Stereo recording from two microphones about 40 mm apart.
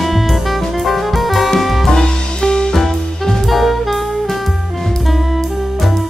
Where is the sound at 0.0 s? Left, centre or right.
Centre.